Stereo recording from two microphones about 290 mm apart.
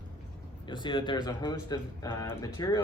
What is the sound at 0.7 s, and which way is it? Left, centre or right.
A man's voice, centre.